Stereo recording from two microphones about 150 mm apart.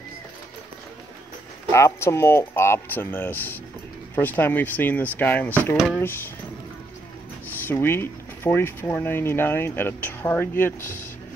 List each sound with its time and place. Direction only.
1.7 s speech: 20° left (ahead or behind)
7.4 s speech: 15° left (ahead or behind)